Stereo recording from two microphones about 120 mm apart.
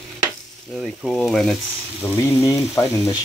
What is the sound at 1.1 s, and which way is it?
Frying, centre (ahead or behind).